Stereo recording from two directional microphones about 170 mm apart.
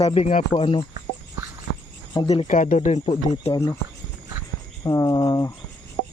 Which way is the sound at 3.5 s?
20° left (ahead or behind).